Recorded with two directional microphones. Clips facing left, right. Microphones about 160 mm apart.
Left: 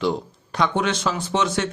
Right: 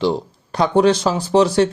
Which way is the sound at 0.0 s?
30° right (ahead or behind).